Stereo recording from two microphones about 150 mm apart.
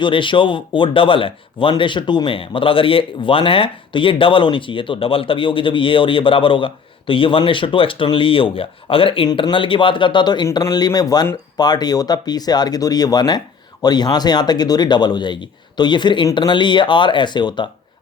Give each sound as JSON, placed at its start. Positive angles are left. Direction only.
{"t": 0.0, "sound": "speech", "side_deg": 35}